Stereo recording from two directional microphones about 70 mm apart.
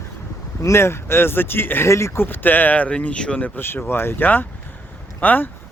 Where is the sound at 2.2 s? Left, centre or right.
Left.